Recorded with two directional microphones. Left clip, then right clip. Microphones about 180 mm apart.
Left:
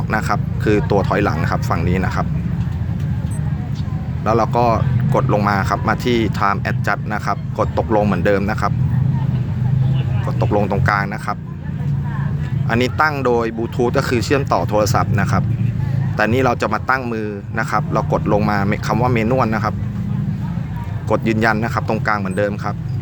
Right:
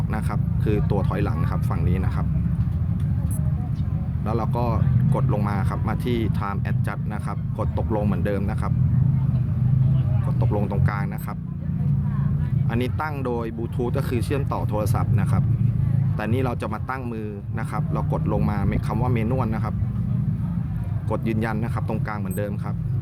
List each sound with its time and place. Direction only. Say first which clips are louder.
0.1 s speech: left 11 dB; 25° left (ahead or behind)
4.3 s speech: left 12 dB; 25° left (ahead or behind)
10.2 s speech: left 11 dB; 25° left (ahead or behind)
12.6 s speech: left 12 dB; 25° left (ahead or behind)
21.1 s speech: left 11 dB; 25° left (ahead or behind)